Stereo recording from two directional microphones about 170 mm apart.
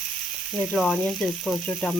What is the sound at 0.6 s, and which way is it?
Frying, centre (ahead or behind).